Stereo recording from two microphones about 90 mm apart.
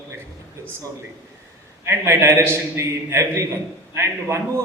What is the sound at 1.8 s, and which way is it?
A man's voice, 30° right (ahead or behind).